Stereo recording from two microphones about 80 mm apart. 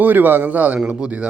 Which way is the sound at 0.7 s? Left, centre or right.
Centre.